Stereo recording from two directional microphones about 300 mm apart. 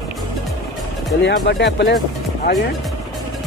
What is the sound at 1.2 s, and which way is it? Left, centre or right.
Speech, left.